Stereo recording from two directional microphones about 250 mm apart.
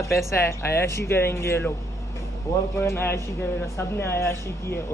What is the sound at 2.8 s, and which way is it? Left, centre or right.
Speech, centre.